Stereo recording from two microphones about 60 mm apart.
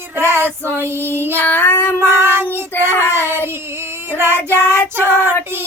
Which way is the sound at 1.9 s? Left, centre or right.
Right.